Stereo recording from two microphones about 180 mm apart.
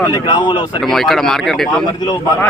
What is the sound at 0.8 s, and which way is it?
Speech, centre (ahead or behind).